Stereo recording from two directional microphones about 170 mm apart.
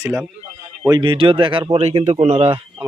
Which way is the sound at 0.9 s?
25° right (ahead or behind).